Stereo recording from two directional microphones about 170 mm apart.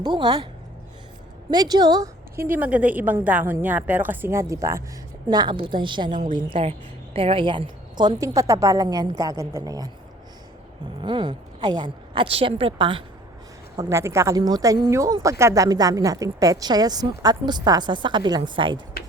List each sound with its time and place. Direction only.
0.0 s speech: 25° right (ahead or behind)
1.5 s a woman's voice: 25° right (ahead or behind)
11.0 s speech: 25° right (ahead or behind)
13.7 s speech: 15° right (ahead or behind)